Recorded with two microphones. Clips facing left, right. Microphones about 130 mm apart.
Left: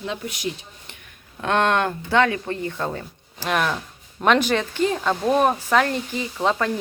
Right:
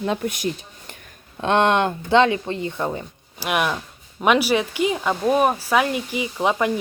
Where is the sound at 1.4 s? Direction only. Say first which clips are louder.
Right 2 dB; 20° right (ahead or behind).